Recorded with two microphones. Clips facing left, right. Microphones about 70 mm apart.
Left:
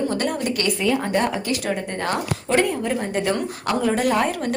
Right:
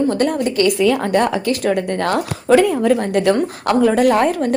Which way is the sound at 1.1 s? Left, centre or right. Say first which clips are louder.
Right 5 dB; right.